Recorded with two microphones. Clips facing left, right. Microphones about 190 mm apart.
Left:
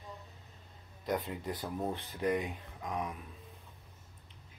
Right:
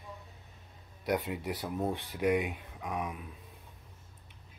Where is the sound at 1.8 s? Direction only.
10° right (ahead or behind).